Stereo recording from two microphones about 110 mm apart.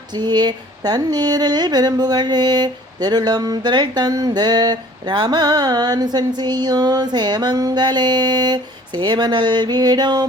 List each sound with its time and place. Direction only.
0.1 s speech: 40° right (ahead or behind)